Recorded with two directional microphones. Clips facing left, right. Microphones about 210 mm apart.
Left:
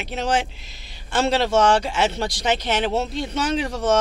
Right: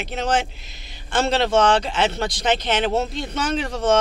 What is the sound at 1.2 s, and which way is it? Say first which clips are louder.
Speech: even; 10° left (ahead or behind).